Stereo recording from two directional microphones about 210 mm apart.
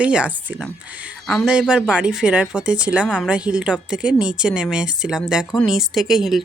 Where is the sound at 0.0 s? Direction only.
5° right (ahead or behind).